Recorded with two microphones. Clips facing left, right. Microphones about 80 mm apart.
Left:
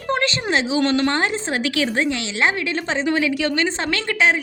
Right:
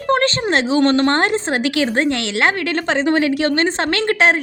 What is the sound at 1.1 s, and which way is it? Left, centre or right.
A woman's voice, right.